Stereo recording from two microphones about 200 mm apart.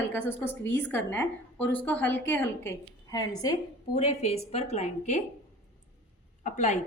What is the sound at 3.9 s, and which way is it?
A woman's voice, 30° left (ahead or behind).